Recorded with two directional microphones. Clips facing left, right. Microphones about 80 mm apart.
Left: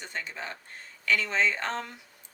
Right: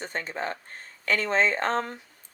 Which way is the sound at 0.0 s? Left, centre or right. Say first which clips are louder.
Right 6 dB; right.